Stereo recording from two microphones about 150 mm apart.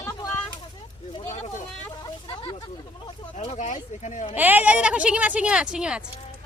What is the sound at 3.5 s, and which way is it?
Speech, 50° left (ahead or behind).